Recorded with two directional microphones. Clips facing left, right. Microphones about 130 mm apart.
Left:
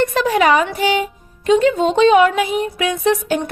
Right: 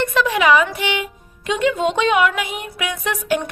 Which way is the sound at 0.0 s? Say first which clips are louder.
Left 3 dB; 40° left (ahead or behind).